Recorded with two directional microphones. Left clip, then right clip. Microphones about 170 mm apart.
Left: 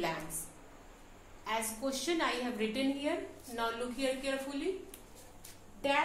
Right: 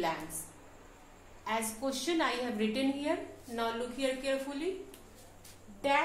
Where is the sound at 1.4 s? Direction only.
20° right (ahead or behind).